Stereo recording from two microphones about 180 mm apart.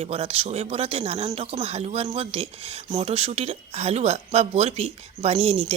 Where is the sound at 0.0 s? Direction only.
30° right (ahead or behind).